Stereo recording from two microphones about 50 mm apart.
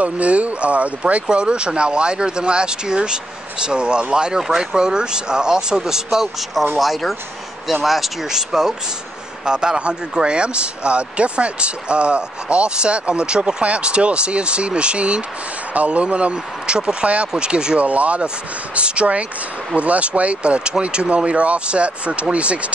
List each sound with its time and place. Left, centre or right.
0.0 s speech: right